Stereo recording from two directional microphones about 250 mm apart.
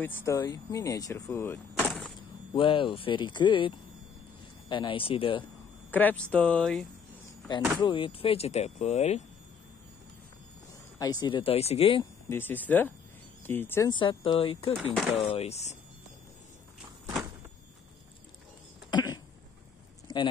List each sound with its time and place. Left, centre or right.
0.0 s speech: centre
1.8 s vehicle: centre
2.5 s speech: centre
5.9 s speech: centre
7.8 s speech: left
11.0 s speech: centre
12.3 s speech: centre; by 15.7 s left
18.9 s a sound: centre